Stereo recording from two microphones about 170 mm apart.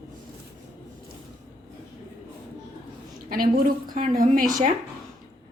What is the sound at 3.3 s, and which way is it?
A woman's voice, 60° right (ahead or behind).